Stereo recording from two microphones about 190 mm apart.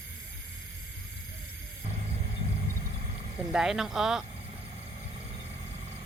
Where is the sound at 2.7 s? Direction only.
40° right (ahead or behind).